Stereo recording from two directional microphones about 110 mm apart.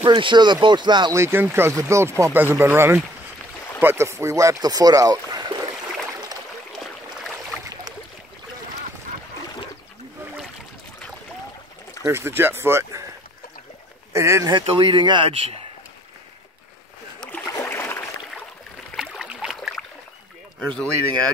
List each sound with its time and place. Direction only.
0.0 s speech: 45° right (ahead or behind)
1.1 s speech: 20° right (ahead or behind)
12.0 s speech: 25° right (ahead or behind)
14.1 s speech: 25° right (ahead or behind)
14.5 s speech: 50° right (ahead or behind)
17.5 s a sound: 25° left (ahead or behind)
18.9 s boat: 5° right (ahead or behind)
20.5 s speech: 5° left (ahead or behind)